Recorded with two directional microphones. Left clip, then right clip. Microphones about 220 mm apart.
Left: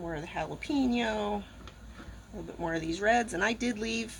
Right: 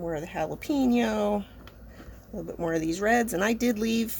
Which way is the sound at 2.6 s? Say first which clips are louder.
Right 5 dB; 55° right (ahead or behind).